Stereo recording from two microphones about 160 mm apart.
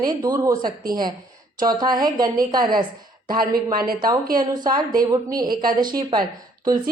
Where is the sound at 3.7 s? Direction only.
65° right (ahead or behind).